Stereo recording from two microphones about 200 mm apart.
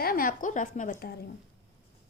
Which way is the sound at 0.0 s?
45° left (ahead or behind).